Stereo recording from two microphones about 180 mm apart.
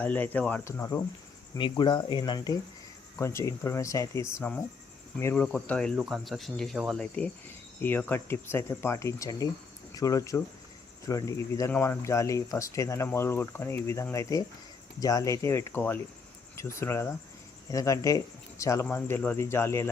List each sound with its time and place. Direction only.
0.0 s speech: 10° left (ahead or behind)
1.5 s speech: 25° left (ahead or behind)